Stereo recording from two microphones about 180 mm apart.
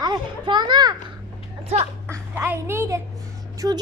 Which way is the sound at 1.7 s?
35° right (ahead or behind).